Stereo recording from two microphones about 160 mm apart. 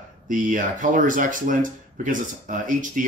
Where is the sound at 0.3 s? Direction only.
55° right (ahead or behind).